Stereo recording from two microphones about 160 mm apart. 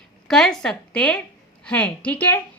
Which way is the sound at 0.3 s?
5° left (ahead or behind).